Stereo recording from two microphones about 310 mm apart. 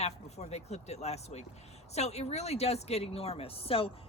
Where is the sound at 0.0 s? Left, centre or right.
Left.